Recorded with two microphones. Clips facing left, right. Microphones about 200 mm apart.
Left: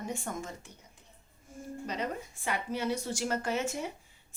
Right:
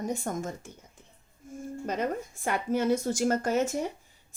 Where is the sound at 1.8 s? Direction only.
50° right (ahead or behind).